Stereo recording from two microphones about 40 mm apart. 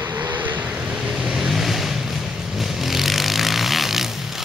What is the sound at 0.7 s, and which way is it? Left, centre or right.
Vehicle, right.